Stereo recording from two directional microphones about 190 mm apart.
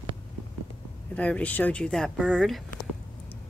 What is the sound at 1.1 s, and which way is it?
Speech, 5° left (ahead or behind).